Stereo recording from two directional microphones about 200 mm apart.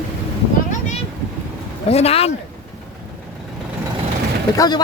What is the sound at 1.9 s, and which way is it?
Speech, 30° left (ahead or behind).